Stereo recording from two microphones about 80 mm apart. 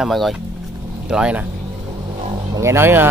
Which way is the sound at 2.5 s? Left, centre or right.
Right.